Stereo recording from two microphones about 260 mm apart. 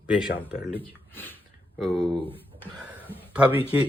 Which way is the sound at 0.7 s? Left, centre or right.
Centre.